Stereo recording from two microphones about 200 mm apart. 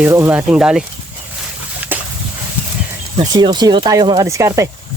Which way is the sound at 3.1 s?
20° right (ahead or behind).